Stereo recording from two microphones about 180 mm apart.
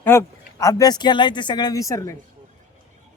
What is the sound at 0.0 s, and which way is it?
Speech, 15° left (ahead or behind).